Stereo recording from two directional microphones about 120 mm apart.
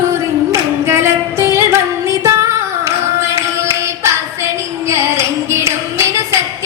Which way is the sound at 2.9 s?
25° right (ahead or behind).